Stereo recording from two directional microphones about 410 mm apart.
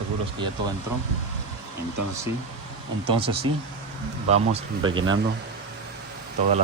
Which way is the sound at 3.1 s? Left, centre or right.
Centre.